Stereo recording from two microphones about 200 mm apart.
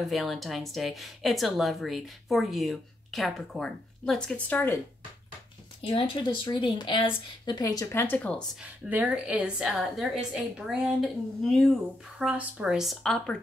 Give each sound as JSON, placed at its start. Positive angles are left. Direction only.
{"t": 0.1, "sound": "speech", "side_deg": 0}
{"t": 5.8, "sound": "speech", "side_deg": 25}
{"t": 8.6, "sound": "speech", "side_deg": -5}